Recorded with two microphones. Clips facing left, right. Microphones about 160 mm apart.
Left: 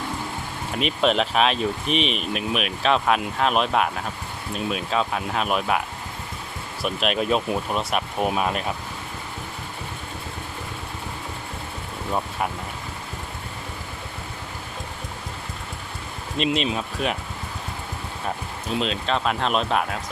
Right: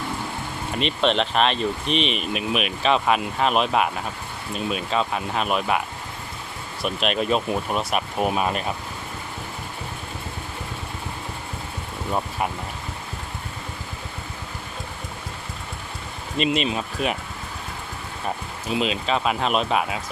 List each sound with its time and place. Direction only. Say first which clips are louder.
0.7 s speech: even; 5° left (ahead or behind)
6.8 s speech: even; centre (ahead or behind)
16.4 s speech: right 1 dB; centre (ahead or behind)
18.7 s speech: right 1 dB; 5° right (ahead or behind)